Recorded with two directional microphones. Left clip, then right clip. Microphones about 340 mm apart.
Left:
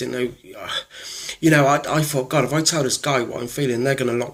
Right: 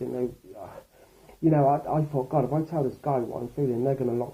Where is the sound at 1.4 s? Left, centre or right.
Left.